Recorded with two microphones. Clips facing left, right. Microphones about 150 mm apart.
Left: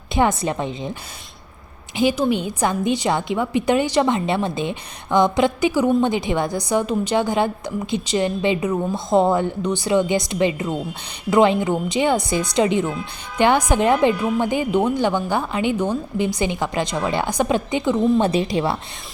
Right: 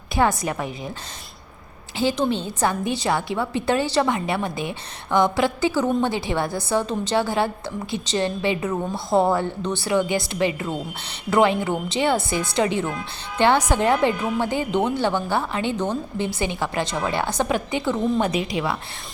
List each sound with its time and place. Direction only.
0.1 s a woman's voice: 20° left (ahead or behind)
2.0 s a woman's voice: 15° left (ahead or behind)
18.3 s a woman's voice: 35° left (ahead or behind)